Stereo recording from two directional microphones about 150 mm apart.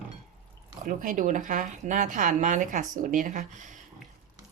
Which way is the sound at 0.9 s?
60° right (ahead or behind).